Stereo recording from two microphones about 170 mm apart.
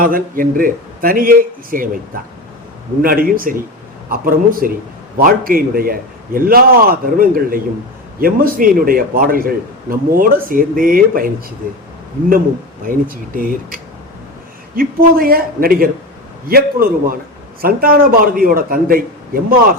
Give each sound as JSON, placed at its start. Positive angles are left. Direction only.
{"t": 0.0, "sound": "a man's voice", "side_deg": -55}
{"t": 3.0, "sound": "a man's voice", "side_deg": -60}
{"t": 12.9, "sound": "a man's voice", "side_deg": -55}
{"t": 14.8, "sound": "a man's voice", "side_deg": -60}